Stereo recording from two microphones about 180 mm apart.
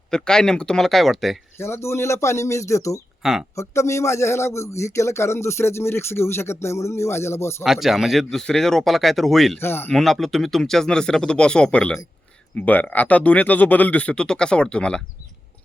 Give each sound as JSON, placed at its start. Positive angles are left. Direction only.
{"t": 0.1, "sound": "speech", "side_deg": 5}
{"t": 1.5, "sound": "a man's voice", "side_deg": 15}
{"t": 7.6, "sound": "speech", "side_deg": 0}
{"t": 9.6, "sound": "a man's voice", "side_deg": 10}
{"t": 9.9, "sound": "a man's voice", "side_deg": 0}